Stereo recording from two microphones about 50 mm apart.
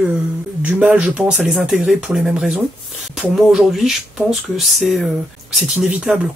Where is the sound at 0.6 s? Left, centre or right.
Right.